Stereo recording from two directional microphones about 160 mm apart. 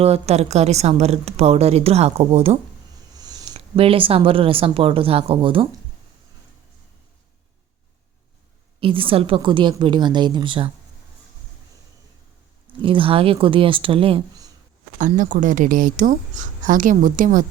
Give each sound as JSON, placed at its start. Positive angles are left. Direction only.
{"t": 0.0, "sound": "a woman's voice", "side_deg": -40}
{"t": 3.2, "sound": "a sound", "side_deg": -25}
{"t": 3.5, "sound": "a woman's voice", "side_deg": -35}
{"t": 8.8, "sound": "a woman's voice", "side_deg": -35}
{"t": 12.8, "sound": "a woman's voice", "side_deg": -35}
{"t": 14.9, "sound": "speech", "side_deg": -50}